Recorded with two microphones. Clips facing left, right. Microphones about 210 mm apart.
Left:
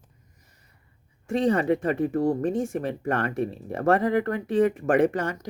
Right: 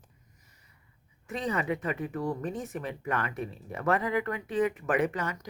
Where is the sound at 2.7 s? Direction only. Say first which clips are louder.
Left 6 dB; 45° left (ahead or behind).